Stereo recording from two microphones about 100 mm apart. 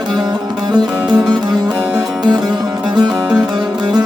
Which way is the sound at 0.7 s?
45° right (ahead or behind).